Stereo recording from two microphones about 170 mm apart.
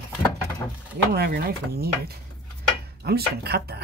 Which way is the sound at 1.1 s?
65° right (ahead or behind).